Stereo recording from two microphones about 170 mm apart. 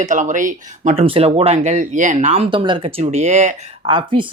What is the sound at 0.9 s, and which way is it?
Speech, 35° right (ahead or behind).